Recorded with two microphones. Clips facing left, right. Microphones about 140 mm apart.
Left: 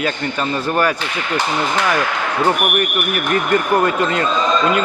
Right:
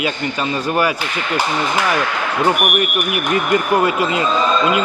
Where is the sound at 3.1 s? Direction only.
10° right (ahead or behind).